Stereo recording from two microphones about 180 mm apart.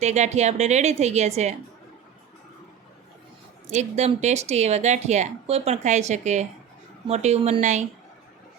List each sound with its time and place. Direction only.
0.0 s speech: 40° right (ahead or behind)
3.7 s speech: 40° right (ahead or behind)